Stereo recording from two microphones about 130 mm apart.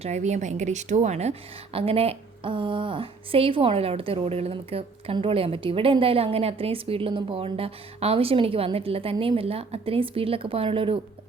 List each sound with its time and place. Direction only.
0.0 s a woman's voice: 65° right (ahead or behind); by 11.0 s 45° right (ahead or behind)